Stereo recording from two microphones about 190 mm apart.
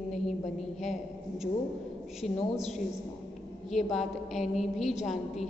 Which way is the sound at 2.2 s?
Centre (ahead or behind).